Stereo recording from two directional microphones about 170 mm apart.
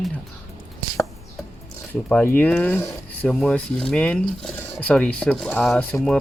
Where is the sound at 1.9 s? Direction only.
10° left (ahead or behind).